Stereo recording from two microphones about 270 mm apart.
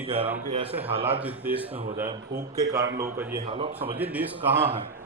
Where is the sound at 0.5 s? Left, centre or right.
Right.